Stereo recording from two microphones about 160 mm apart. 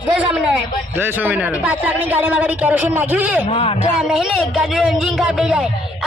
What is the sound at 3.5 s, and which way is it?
Speech, 35° left (ahead or behind).